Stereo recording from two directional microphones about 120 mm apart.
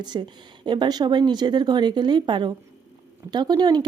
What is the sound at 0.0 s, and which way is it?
A woman's voice, 35° right (ahead or behind).